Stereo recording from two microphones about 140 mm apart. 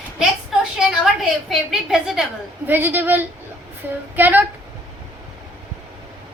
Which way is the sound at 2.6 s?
15° right (ahead or behind).